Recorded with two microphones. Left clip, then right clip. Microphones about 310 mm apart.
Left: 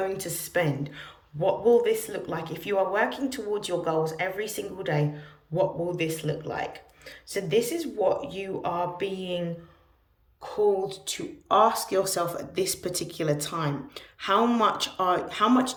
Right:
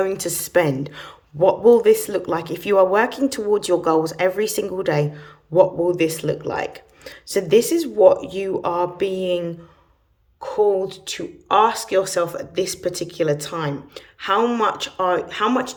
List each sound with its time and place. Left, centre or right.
0.0 s speech: centre